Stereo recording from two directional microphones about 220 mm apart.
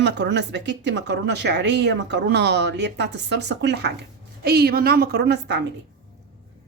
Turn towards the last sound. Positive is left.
turn(degrees=-50)  # may be behind; listen again after turning